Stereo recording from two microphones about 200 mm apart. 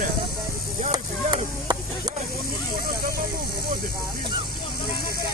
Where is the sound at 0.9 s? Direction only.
20° right (ahead or behind).